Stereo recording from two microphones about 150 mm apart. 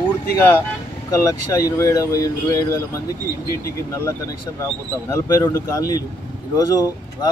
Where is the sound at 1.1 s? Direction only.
20° left (ahead or behind).